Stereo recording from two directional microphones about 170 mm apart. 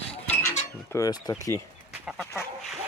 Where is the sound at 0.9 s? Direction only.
20° left (ahead or behind).